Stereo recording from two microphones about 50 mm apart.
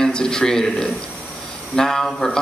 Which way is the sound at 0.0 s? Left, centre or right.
Centre.